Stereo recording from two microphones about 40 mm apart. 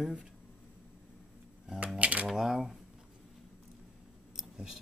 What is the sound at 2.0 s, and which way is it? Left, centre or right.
Typewriter, right.